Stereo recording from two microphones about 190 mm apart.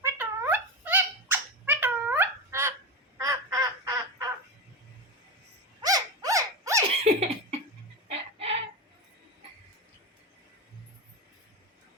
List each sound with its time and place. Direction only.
0.0 s a sound: 10° right (ahead or behind)
3.2 s bird: 15° right (ahead or behind)
5.8 s dog: 20° right (ahead or behind)
6.8 s giggle: 35° right (ahead or behind)
8.0 s chicken: 35° right (ahead or behind)